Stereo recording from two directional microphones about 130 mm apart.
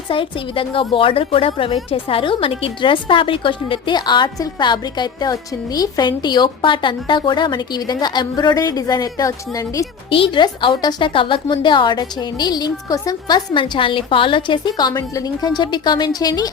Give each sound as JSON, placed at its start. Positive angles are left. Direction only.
{"t": 0.1, "sound": "a woman's voice", "side_deg": 40}
{"t": 10.1, "sound": "a woman's voice", "side_deg": 40}